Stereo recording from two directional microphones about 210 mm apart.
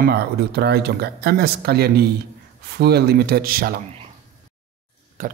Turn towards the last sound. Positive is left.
turn(degrees=-40)  # may be behind; listen again after turning